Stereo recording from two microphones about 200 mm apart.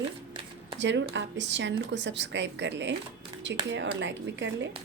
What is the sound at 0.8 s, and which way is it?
Speech, 60° right (ahead or behind).